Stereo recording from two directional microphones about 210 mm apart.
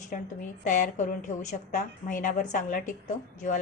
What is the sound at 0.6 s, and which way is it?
A woman's voice, 35° left (ahead or behind).